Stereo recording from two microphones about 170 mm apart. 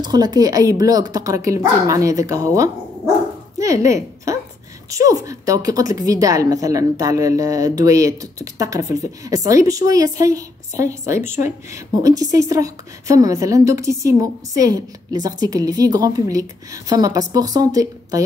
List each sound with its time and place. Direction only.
0.0 s a woman's voice: 25° right (ahead or behind)